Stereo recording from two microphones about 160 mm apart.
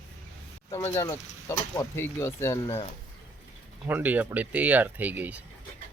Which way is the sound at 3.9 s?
10° right (ahead or behind).